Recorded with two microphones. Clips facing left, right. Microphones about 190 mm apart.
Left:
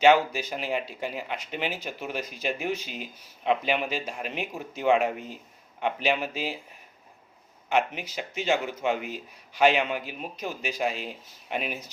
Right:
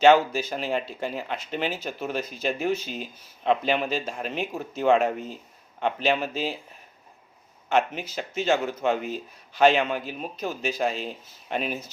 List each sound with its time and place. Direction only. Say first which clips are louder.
0.0 s speech: right 2 dB; 10° left (ahead or behind)
7.7 s speech: right 2 dB; 10° left (ahead or behind)